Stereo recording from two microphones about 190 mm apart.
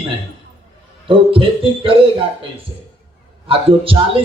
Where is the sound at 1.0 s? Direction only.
30° right (ahead or behind).